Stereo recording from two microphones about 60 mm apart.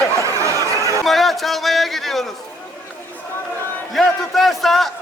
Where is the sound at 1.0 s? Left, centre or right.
Centre.